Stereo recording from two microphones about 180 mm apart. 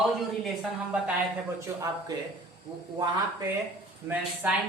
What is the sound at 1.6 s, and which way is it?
Speech, 15° right (ahead or behind).